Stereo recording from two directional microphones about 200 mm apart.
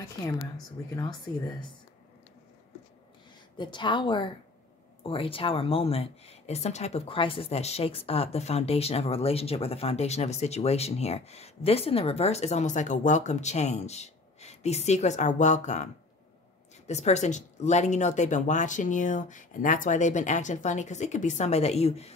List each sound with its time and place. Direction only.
3.5 s a woman's voice: 25° left (ahead or behind)